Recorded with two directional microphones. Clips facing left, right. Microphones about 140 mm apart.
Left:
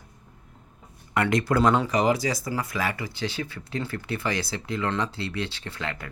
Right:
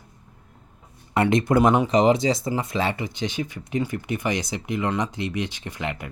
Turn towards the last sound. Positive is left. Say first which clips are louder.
# right 3 dB
turn(degrees=-20)  # may be behind; listen again after turning